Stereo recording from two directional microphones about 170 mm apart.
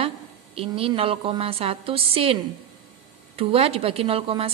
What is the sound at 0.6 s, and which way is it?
A woman's voice, 35° right (ahead or behind).